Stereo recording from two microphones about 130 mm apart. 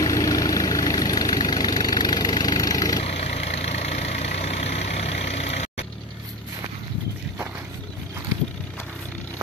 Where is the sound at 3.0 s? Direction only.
55° left (ahead or behind).